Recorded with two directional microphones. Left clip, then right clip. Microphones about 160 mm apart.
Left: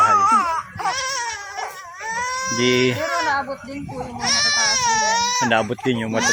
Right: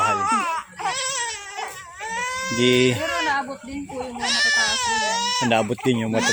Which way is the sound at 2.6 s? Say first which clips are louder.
Right 1 dB; 35° right (ahead or behind).